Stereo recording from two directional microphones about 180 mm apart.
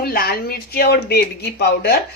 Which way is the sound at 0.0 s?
55° left (ahead or behind).